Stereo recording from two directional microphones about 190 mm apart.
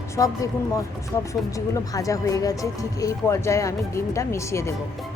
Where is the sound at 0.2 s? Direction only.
15° left (ahead or behind).